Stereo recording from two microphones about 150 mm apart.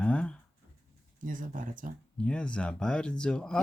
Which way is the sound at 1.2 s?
60° right (ahead or behind).